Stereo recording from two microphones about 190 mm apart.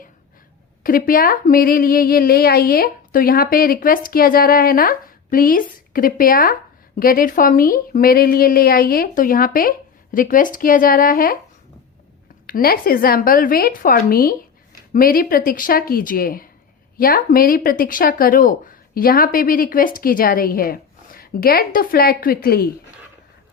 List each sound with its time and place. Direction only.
0.8 s speech: 50° left (ahead or behind)
12.5 s speech: 50° left (ahead or behind)